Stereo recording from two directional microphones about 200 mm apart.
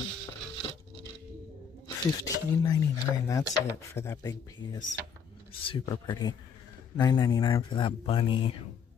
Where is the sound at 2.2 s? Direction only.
20° left (ahead or behind).